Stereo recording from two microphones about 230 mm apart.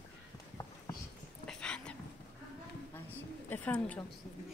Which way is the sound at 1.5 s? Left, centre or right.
Centre.